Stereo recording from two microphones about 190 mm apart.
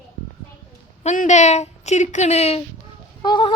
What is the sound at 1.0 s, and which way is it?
A woman's voice, 35° left (ahead or behind).